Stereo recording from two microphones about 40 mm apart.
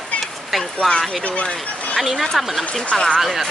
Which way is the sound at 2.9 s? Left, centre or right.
Left.